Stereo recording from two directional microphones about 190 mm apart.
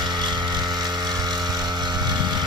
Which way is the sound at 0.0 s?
20° right (ahead or behind).